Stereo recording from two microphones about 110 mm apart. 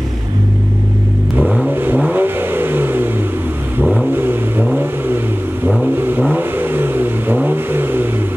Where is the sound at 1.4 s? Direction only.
10° right (ahead or behind).